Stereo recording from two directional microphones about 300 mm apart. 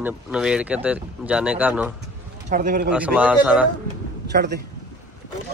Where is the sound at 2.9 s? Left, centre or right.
Centre.